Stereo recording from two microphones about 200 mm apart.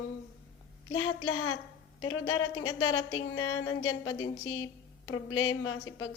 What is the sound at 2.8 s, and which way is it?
Speech, 90° left.